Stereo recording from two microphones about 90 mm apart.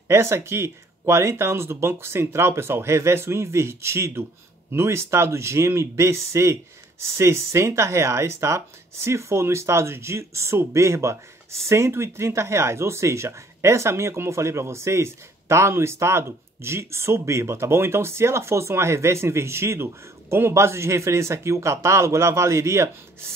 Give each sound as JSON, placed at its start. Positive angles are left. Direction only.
{"t": 0.1, "sound": "speech", "side_deg": -30}